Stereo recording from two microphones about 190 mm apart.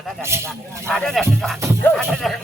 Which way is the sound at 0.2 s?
15° right (ahead or behind).